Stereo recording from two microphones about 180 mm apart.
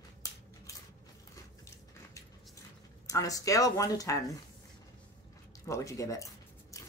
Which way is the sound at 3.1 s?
20° left (ahead or behind).